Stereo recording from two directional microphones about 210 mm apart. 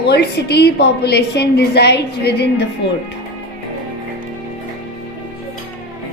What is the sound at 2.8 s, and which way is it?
Music, 55° left (ahead or behind).